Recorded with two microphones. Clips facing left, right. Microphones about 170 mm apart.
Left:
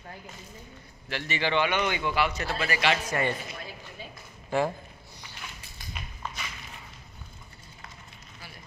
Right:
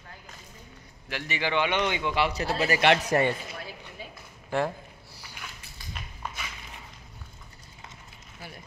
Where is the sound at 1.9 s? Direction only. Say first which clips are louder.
Right 1 dB; 25° right (ahead or behind); by 3.3 s 40° right (ahead or behind).